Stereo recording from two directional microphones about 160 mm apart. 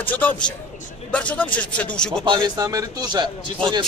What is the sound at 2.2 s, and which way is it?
A man's voice, 30° right (ahead or behind).